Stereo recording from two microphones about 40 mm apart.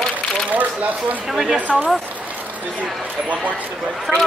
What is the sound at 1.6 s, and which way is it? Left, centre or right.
Speech, right.